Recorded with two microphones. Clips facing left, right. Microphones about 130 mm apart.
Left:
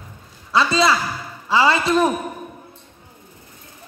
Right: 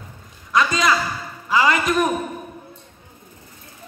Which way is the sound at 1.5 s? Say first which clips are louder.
Left 2 dB; 30° left (ahead or behind).